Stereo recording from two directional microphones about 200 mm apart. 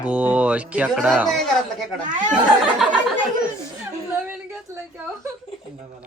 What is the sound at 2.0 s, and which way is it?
Speech, 40° right (ahead or behind).